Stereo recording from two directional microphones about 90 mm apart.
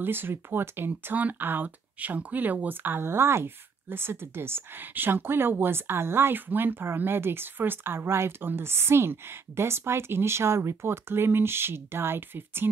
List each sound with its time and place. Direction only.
0.0 s speech: 25° right (ahead or behind)